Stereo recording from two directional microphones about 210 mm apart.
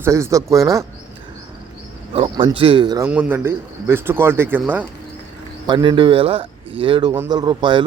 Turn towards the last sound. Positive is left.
turn(degrees=-20)  # may be behind; listen again after turning